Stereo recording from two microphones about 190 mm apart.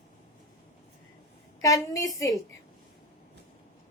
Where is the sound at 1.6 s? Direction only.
15° left (ahead or behind).